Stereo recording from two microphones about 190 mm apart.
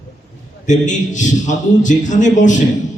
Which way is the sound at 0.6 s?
40° left (ahead or behind).